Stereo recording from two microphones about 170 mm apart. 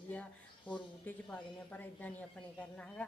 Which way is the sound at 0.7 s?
10° left (ahead or behind).